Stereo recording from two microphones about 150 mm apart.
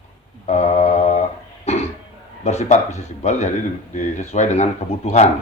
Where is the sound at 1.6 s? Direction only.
50° left (ahead or behind).